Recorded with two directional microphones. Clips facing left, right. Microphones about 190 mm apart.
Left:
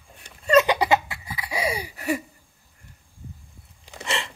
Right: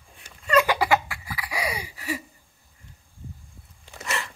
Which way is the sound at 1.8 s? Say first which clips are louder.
Left 6 dB; 50° left (ahead or behind).